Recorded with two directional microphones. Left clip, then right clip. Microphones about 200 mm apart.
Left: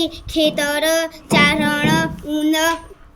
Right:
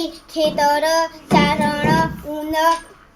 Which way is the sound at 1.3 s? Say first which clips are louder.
Left 2 dB; 55° left (ahead or behind).